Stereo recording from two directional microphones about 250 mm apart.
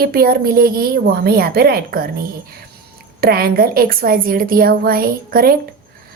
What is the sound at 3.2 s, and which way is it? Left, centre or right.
Speech, right.